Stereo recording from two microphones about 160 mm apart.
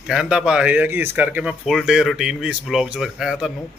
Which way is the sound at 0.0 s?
5° right (ahead or behind).